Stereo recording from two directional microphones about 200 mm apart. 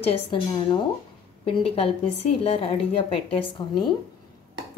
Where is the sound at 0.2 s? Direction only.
25° left (ahead or behind).